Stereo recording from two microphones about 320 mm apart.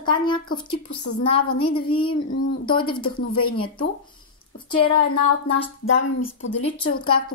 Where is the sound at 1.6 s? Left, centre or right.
Centre.